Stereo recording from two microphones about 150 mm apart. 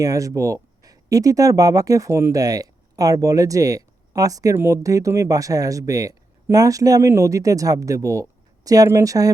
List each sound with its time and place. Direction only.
0.0 s speech: 20° right (ahead or behind)